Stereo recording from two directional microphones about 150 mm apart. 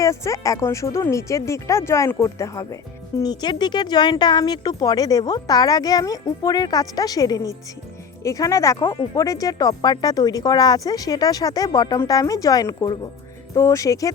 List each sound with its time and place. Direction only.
0.0 s speech: 20° left (ahead or behind)